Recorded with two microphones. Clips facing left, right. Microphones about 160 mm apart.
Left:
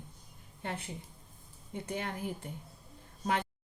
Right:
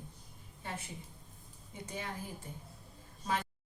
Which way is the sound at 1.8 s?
60° left (ahead or behind).